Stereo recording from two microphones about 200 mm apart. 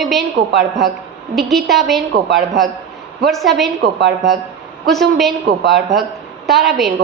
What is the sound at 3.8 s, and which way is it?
Speech, 60° right (ahead or behind).